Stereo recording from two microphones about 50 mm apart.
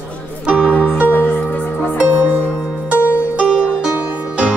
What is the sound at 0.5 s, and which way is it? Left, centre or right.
Music, right.